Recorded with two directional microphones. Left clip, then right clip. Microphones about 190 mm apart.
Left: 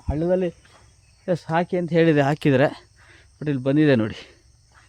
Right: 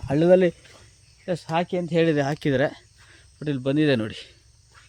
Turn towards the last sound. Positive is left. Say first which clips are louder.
# left 3 dB
turn(degrees=30)  # may be behind; listen again after turning